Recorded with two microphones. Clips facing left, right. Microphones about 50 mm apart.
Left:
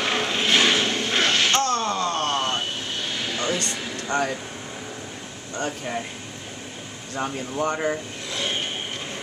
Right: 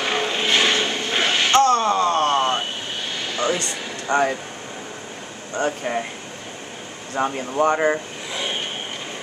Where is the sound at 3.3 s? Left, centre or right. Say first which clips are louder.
Right 5 dB; centre.